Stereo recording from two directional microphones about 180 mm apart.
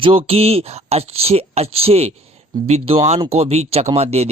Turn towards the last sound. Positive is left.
turn(degrees=-35)  # may be behind; listen again after turning